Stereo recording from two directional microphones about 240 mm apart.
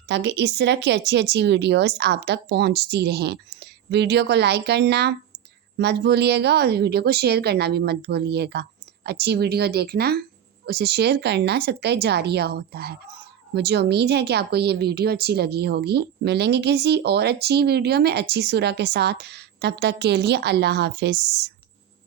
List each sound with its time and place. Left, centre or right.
0.1 s a woman's voice: right